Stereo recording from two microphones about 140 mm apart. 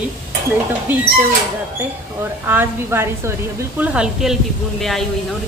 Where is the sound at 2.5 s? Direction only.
15° right (ahead or behind).